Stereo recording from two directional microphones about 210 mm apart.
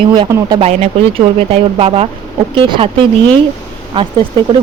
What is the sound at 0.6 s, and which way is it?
Speech, 30° right (ahead or behind).